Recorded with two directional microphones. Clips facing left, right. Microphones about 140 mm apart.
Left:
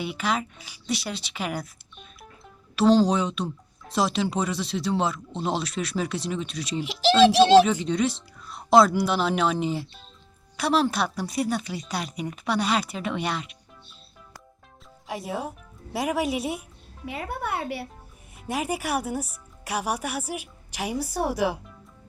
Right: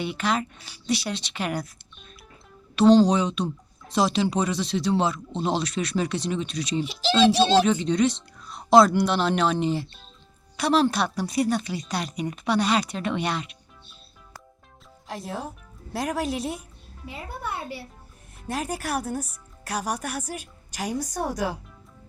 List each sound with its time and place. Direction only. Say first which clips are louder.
0.0 s speech: right 1 dB; 5° left (ahead or behind)
2.7 s speech: right 3 dB; centre (ahead or behind)
15.0 s speech: left 2 dB; 5° left (ahead or behind)
17.1 s speech: left 4 dB; 65° left (ahead or behind)
18.3 s speech: left 2 dB; 10° left (ahead or behind)